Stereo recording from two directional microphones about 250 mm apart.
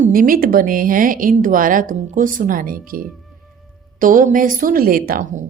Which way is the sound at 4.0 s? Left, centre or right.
Right.